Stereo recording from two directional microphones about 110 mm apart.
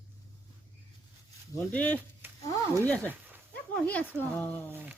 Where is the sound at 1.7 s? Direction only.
15° left (ahead or behind).